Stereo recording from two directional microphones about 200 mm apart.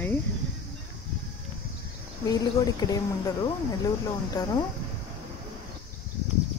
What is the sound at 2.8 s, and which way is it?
Speech, 15° left (ahead or behind).